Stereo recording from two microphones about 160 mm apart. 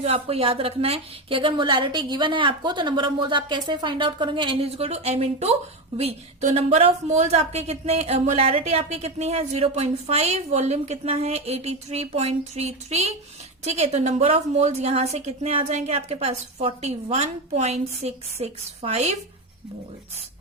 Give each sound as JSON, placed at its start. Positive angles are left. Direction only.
{"t": 0.0, "sound": "a woman's voice", "side_deg": -40}